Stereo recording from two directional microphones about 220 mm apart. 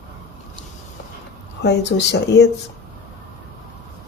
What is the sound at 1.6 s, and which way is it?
Speech, 50° left (ahead or behind).